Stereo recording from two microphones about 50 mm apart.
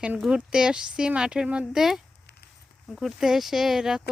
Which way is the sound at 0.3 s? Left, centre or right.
Centre.